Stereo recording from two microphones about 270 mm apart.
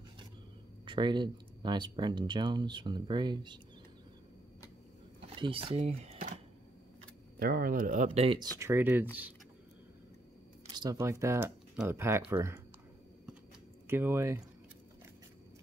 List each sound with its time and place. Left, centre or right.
0.8 s speech: centre
5.4 s speech: centre
8.5 s speech: centre
10.8 s speech: centre
13.8 s speech: centre